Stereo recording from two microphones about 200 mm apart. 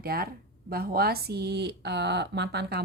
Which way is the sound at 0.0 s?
50° right (ahead or behind).